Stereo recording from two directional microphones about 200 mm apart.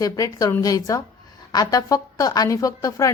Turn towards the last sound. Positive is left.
turn(degrees=15)  # may be behind; listen again after turning